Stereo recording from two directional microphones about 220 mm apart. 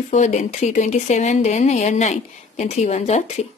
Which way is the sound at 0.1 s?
30° left (ahead or behind).